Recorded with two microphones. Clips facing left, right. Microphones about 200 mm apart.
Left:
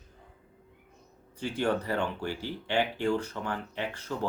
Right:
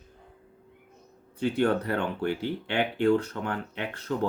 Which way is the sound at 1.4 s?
60° right (ahead or behind).